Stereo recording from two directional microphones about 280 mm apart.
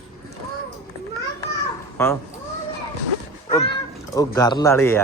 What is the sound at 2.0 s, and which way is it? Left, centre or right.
Speech, centre.